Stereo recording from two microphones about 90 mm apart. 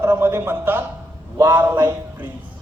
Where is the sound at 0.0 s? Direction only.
30° right (ahead or behind).